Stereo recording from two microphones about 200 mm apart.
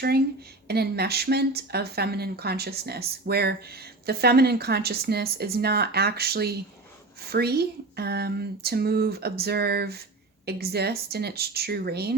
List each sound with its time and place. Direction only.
0.7 s speech: 50° right (ahead or behind)